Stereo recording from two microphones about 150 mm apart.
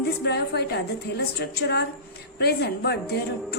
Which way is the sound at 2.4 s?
90° left.